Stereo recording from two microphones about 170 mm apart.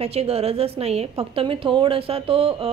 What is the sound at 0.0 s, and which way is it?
A woman's voice, 35° right (ahead or behind).